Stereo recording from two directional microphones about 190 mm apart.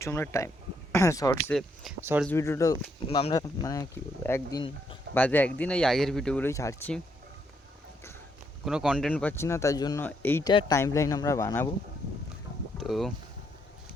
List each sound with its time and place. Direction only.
0.0 s speech: 15° left (ahead or behind)
1.5 s speech: centre (ahead or behind)
2.0 s speech: 10° right (ahead or behind)
2.2 s speech: 10° left (ahead or behind)
6.5 s speech: 15° left (ahead or behind)
8.6 s speech: centre (ahead or behind)
10.5 s speech: 25° left (ahead or behind)
12.7 s speech: centre (ahead or behind)